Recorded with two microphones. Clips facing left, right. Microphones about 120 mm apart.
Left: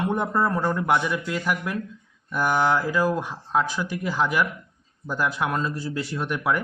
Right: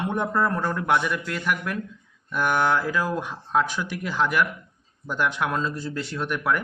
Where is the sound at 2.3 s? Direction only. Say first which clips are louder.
Left 1 dB; 5° left (ahead or behind).